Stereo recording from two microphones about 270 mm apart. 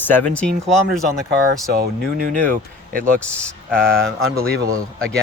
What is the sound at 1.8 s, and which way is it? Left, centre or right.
Speech, right.